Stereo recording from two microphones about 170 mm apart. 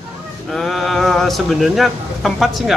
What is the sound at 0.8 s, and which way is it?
Speech, centre (ahead or behind).